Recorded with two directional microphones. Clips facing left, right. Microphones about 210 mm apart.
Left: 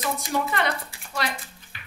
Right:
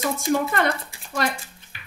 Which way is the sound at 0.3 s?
45° right (ahead or behind).